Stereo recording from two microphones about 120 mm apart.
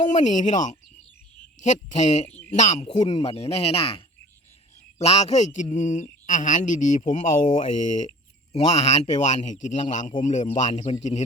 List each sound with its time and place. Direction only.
0.1 s speech: 90° left
1.6 s speech: 80° left
2.3 s a sound: 15° left (ahead or behind)
2.8 s speech: 35° left (ahead or behind)
3.1 s speech: 60° left (ahead or behind)
4.9 s speech: 65° left (ahead or behind)
5.7 s speech: 90° left
7.4 s speech: 70° left (ahead or behind)